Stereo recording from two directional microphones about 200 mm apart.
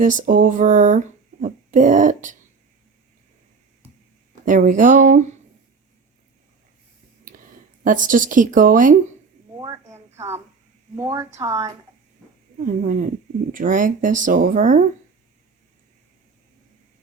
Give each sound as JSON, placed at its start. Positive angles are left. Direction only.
{"t": 0.0, "sound": "speech", "side_deg": -40}
{"t": 4.4, "sound": "speech", "side_deg": -40}
{"t": 7.9, "sound": "speech", "side_deg": -40}
{"t": 9.6, "sound": "a sound", "side_deg": -15}
{"t": 10.9, "sound": "speech", "side_deg": -15}
{"t": 12.6, "sound": "speech", "side_deg": -40}